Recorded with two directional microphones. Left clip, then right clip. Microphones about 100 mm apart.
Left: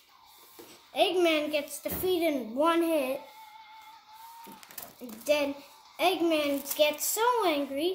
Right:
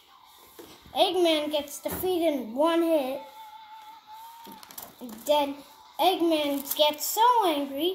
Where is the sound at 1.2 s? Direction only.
25° left (ahead or behind).